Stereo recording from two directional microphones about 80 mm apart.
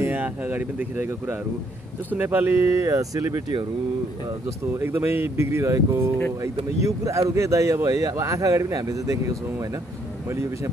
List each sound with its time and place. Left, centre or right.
0.0 s speech: right
4.7 s speech: right